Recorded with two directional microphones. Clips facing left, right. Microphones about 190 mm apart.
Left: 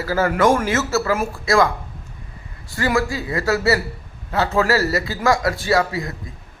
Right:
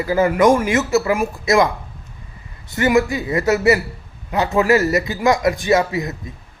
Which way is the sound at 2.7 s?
20° right (ahead or behind).